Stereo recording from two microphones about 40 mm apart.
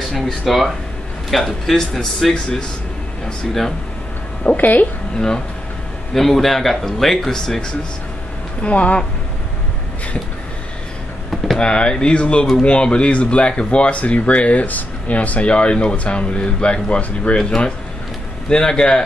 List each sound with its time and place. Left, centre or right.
0.5 s speech: centre
4.6 s speech: left
6.1 s speech: centre
8.6 s speech: left
11.2 s vehicle: centre
11.6 s speech: left
18.5 s speech: centre